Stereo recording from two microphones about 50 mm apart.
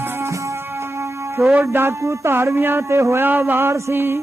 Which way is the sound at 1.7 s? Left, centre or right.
Right.